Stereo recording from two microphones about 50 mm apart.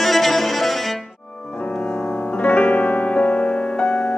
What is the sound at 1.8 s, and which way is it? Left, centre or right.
Music, left.